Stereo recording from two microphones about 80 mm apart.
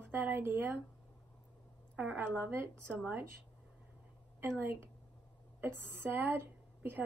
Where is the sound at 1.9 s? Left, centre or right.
Right.